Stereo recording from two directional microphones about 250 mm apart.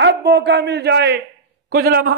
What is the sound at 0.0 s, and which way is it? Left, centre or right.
A man's voice, right.